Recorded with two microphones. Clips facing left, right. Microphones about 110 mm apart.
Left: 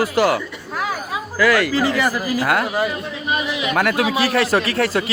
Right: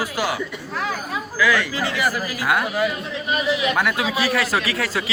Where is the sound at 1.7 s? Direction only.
35° left (ahead or behind).